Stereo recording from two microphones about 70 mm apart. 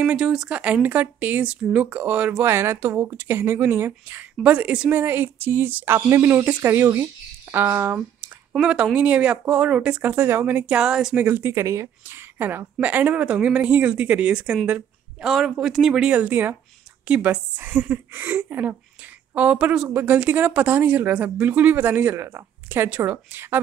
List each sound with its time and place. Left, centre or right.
0.0 s speech: centre
2.4 s speech: right
4.4 s speech: centre
5.9 s speech: right
8.5 s speech: centre
10.1 s speech: right
10.7 s speech: centre
11.1 s speech: right
11.5 s speech: right
12.1 s speech: right
15.2 s speech: centre
16.1 s speech: right
19.9 s speech: right